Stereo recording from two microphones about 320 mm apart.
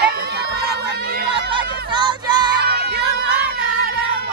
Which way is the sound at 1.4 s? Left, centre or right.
Centre.